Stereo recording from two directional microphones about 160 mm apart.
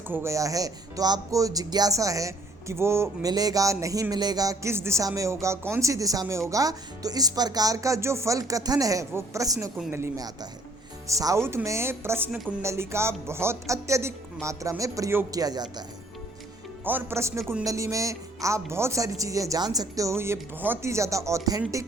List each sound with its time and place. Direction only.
0.1 s speech: 15° right (ahead or behind)
16.8 s speech: 15° right (ahead or behind)